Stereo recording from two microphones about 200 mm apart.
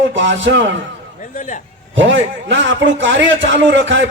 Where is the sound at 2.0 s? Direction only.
65° right (ahead or behind).